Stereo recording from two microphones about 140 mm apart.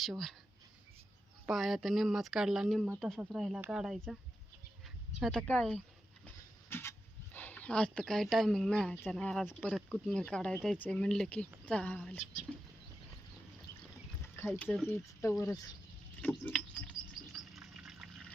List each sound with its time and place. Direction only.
0.0 s speech: centre (ahead or behind)
1.5 s speech: centre (ahead or behind)
5.2 s speech: 5° left (ahead or behind)
6.2 s a sound: 15° left (ahead or behind)
7.3 s speech: 10° left (ahead or behind)
14.3 s speech: 15° left (ahead or behind)
16.2 s a sound: 10° left (ahead or behind)
17.3 s water: centre (ahead or behind)